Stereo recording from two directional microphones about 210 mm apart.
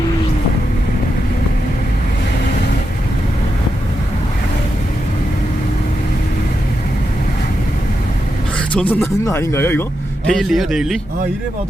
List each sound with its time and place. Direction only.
8.9 s speech: 10° left (ahead or behind)
10.2 s a man's voice: centre (ahead or behind)